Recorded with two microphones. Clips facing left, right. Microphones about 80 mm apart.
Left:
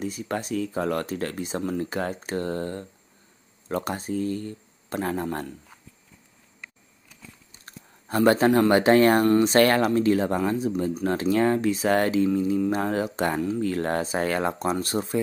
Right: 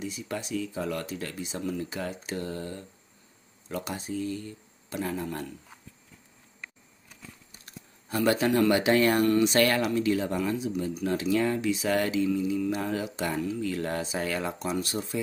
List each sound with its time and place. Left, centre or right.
0.0 s speech: left
8.1 s speech: left